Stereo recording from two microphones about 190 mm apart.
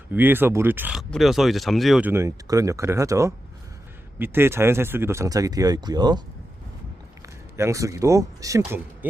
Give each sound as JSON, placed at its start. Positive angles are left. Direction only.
{"t": 0.1, "sound": "speech", "side_deg": -10}
{"t": 7.5, "sound": "speech", "side_deg": -15}